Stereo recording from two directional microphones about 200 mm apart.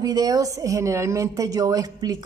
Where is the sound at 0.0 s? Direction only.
20° right (ahead or behind).